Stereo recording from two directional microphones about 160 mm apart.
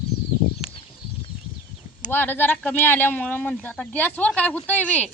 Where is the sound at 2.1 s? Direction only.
10° left (ahead or behind).